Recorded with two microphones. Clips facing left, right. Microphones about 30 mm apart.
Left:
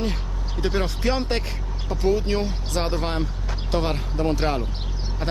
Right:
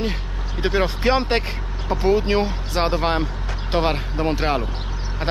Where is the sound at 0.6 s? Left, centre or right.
Right.